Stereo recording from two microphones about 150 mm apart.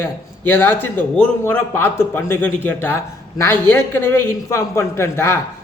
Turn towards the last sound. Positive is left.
turn(degrees=15)  # may be behind; listen again after turning